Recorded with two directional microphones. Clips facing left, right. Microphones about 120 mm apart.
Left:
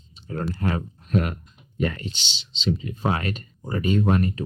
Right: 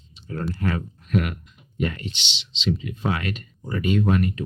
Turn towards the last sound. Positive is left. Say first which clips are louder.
# even
turn(degrees=35)  # may be behind; listen again after turning